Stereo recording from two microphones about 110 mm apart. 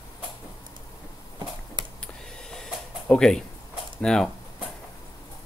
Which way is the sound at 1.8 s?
45° right (ahead or behind).